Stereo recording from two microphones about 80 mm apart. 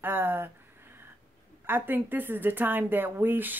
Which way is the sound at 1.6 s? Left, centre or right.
Right.